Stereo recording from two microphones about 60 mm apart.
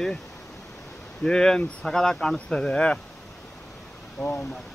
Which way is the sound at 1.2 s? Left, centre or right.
Centre.